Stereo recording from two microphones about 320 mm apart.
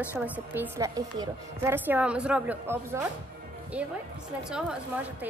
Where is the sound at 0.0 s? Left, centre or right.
Centre.